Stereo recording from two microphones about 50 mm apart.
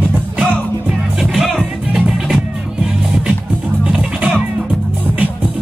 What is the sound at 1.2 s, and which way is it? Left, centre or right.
Music, centre.